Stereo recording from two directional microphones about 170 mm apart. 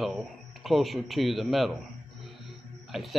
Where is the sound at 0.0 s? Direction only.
Centre (ahead or behind).